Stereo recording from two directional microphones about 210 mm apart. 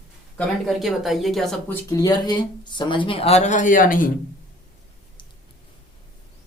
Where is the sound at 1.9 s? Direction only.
20° left (ahead or behind); by 4.1 s 40° left (ahead or behind).